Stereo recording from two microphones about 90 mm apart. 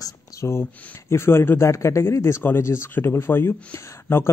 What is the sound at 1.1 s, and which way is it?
Speech, 25° left (ahead or behind).